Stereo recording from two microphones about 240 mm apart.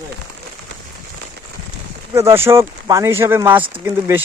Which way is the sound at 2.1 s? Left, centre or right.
Centre.